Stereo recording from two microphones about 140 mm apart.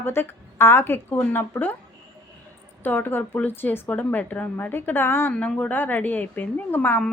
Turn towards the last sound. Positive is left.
turn(degrees=10)  # may be behind; listen again after turning